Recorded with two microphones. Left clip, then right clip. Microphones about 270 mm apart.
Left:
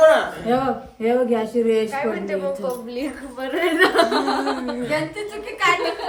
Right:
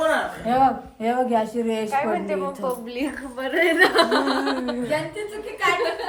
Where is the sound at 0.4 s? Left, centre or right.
Centre.